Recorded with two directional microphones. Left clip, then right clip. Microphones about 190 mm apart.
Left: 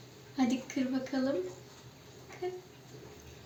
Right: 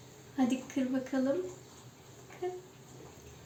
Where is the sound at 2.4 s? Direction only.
Centre (ahead or behind).